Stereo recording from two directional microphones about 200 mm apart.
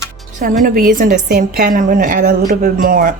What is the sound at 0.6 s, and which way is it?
A woman's voice, 40° right (ahead or behind).